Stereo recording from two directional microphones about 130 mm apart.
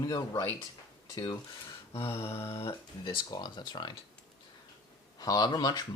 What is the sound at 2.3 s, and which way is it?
Speech, 20° left (ahead or behind).